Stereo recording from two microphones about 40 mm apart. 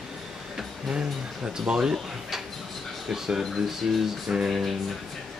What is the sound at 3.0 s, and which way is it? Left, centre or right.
Speech, centre.